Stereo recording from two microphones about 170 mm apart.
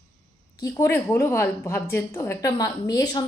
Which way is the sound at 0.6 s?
20° left (ahead or behind).